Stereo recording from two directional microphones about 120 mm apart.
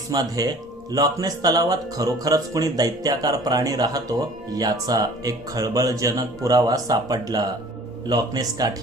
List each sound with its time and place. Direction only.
0.1 s speech: 30° right (ahead or behind)